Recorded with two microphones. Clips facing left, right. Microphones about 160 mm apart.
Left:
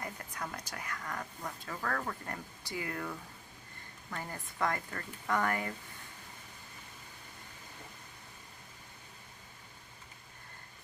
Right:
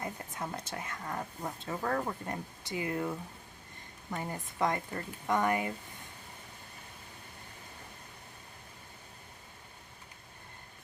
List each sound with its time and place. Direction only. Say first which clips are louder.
0.0 s speech: right 3 dB; 25° right (ahead or behind)